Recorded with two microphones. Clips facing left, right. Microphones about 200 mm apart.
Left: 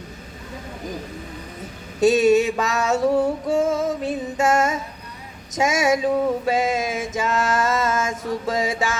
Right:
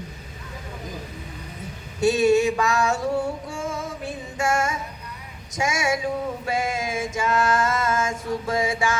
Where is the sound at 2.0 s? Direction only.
25° left (ahead or behind).